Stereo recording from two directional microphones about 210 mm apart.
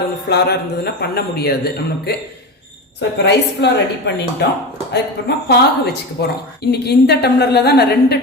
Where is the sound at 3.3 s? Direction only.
55° left (ahead or behind).